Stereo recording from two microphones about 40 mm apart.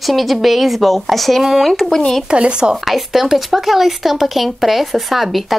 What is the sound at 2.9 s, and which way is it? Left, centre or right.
Speech, centre.